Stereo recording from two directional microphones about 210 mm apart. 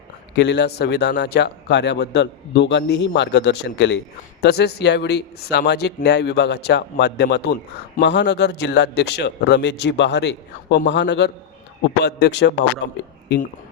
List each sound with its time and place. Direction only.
0.3 s a man's voice: 55° left (ahead or behind)